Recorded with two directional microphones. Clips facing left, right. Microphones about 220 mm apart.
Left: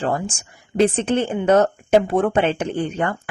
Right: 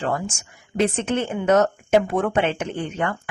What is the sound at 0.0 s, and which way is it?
Speech, 30° left (ahead or behind).